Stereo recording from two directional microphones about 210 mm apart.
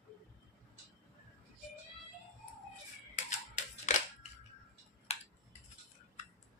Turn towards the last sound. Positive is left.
turn(degrees=30)  # may be behind; listen again after turning